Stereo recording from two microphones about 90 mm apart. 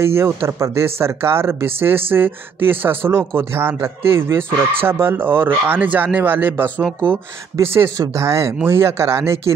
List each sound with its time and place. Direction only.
0.0 s speech: 30° right (ahead or behind)
7.6 s speech: 30° right (ahead or behind)